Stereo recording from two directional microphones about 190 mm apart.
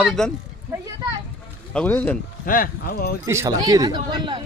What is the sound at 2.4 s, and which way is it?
Speech, 45° left (ahead or behind).